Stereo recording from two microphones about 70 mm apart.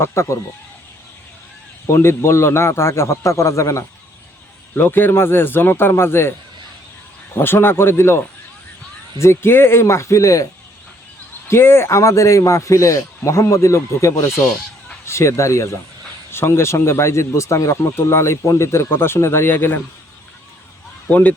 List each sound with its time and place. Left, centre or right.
0.0 s speech: left
1.9 s speech: left
4.7 s speech: left
7.3 s speech: left
11.4 s speech: left